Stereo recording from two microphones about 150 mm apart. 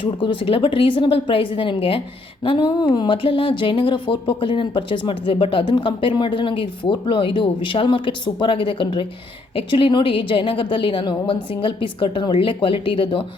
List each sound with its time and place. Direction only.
0.0 s speech: 35° left (ahead or behind)